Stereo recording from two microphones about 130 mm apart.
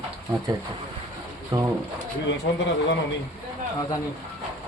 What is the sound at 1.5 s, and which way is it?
Speech, 35° right (ahead or behind).